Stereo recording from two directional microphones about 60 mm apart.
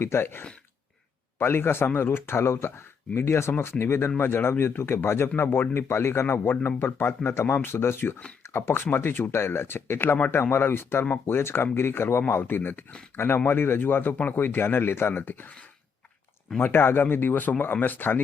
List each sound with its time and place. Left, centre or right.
0.0 s speech: left
16.6 s speech: left